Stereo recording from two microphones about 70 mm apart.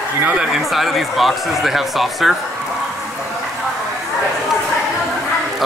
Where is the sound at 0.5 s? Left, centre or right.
Centre.